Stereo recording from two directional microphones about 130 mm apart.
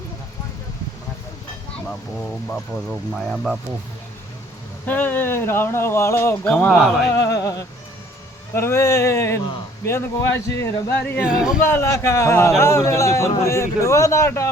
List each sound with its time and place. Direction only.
3.1 s speech: centre (ahead or behind)
4.9 s speech: 15° left (ahead or behind)
7.1 s a man's voice: 25° left (ahead or behind)
11.3 s speech: 5° right (ahead or behind)
11.6 s a man's voice: 20° left (ahead or behind)